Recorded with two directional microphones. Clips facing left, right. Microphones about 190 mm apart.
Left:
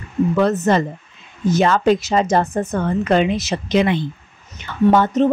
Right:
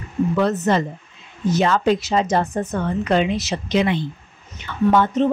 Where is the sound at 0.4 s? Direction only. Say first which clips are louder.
Left 3 dB; 50° left (ahead or behind).